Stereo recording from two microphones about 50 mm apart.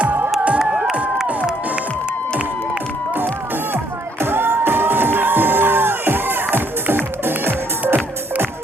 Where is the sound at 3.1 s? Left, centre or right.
Right.